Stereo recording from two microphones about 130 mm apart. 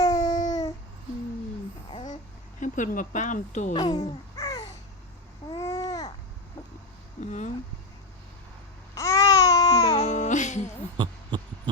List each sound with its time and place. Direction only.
0.0 s babbling: 30° left (ahead or behind)
2.6 s speech: 80° left
4.4 s babbling: 30° left (ahead or behind)
7.2 s a sound: 65° left (ahead or behind)
9.0 s baby cry: 25° left (ahead or behind)
9.8 s music: 55° left (ahead or behind)
10.9 s a sound: 40° right (ahead or behind)